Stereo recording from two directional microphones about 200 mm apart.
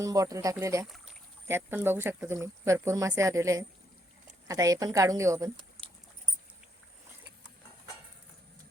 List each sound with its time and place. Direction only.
0.0 s speech: 15° right (ahead or behind)
0.9 s rowboat: centre (ahead or behind)
1.5 s speech: 10° right (ahead or behind)